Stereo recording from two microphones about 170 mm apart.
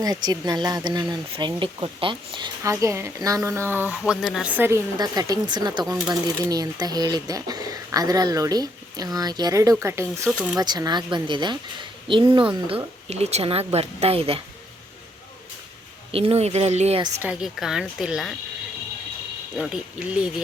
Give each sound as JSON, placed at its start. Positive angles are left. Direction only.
{"t": 0.0, "sound": "speech", "side_deg": -20}
{"t": 4.9, "sound": "speech", "side_deg": -20}
{"t": 10.6, "sound": "speech", "side_deg": -25}
{"t": 16.1, "sound": "speech", "side_deg": -35}
{"t": 17.2, "sound": "a woman's voice", "side_deg": -5}
{"t": 19.5, "sound": "a woman's voice", "side_deg": 0}